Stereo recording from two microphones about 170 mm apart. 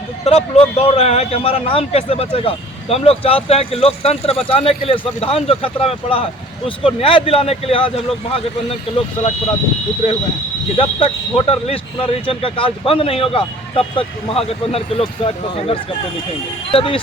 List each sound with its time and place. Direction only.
0.3 s a man's voice: 40° left (ahead or behind)
10.8 s a man's voice: 35° left (ahead or behind)